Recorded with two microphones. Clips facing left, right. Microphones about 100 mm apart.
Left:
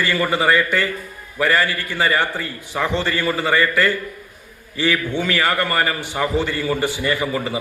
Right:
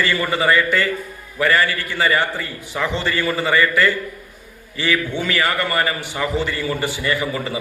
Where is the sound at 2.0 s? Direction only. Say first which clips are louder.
Even; 20° left (ahead or behind).